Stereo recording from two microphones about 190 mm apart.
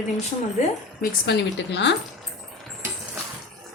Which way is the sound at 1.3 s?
65° left (ahead or behind).